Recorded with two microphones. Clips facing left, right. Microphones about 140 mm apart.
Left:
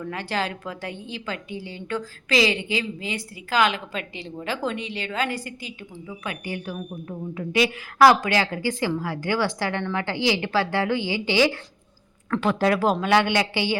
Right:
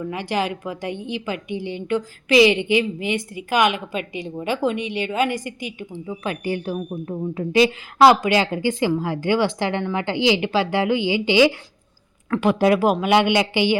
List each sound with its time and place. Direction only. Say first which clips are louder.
0.0 s a woman's voice: right 4 dB; 15° right (ahead or behind)
6.1 s a woman's voice: right 7 dB; 30° right (ahead or behind)
8.0 s a woman's voice: right 3 dB; 15° right (ahead or behind)